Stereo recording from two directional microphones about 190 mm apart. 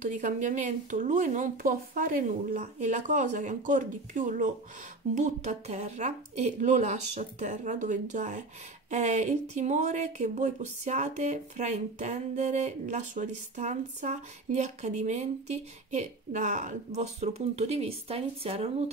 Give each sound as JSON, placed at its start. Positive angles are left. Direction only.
{"t": 0.0, "sound": "speech", "side_deg": -40}